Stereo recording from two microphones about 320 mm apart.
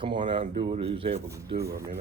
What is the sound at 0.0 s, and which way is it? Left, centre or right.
Speech, centre.